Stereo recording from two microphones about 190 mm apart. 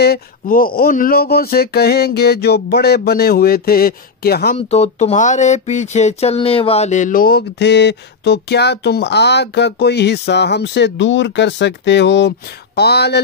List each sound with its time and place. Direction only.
0.0 s speech: 50° left (ahead or behind)
4.6 s speech: 35° left (ahead or behind); by 13.2 s 60° left (ahead or behind)